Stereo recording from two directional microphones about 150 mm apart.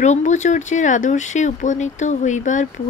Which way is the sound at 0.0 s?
55° left (ahead or behind).